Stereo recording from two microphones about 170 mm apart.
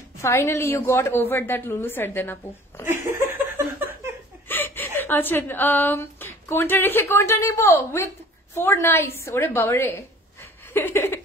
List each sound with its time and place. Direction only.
0.2 s a woman's voice: 15° left (ahead or behind)
3.1 s a sound: 15° right (ahead or behind)
4.5 s a woman's voice: 10° left (ahead or behind)